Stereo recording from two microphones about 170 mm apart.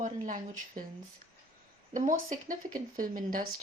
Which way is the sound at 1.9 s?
50° right (ahead or behind).